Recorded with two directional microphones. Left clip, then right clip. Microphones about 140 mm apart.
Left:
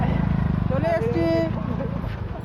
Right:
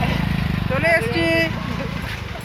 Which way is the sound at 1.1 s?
5° left (ahead or behind).